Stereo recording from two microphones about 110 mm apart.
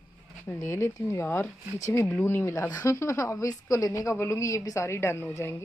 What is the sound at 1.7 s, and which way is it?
Speech, 30° left (ahead or behind).